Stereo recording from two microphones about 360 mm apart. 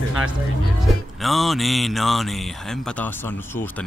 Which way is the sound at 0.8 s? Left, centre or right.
Centre.